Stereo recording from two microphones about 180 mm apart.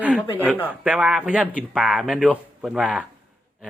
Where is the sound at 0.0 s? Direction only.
5° right (ahead or behind).